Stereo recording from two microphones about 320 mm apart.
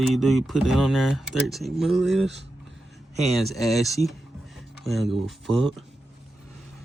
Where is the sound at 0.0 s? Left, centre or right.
Centre.